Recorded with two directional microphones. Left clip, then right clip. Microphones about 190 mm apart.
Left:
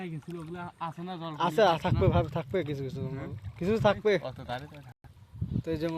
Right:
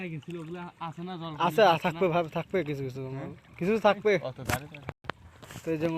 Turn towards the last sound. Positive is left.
turn(degrees=-5)  # may be behind; listen again after turning